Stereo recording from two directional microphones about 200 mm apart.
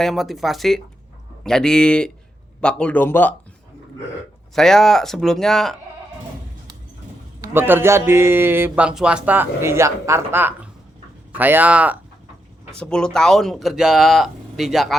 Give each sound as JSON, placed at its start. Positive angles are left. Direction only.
{"t": 0.0, "sound": "speech", "side_deg": 0}
{"t": 4.5, "sound": "speech", "side_deg": 0}
{"t": 7.4, "sound": "a man's voice", "side_deg": -10}
{"t": 12.7, "sound": "speech", "side_deg": 5}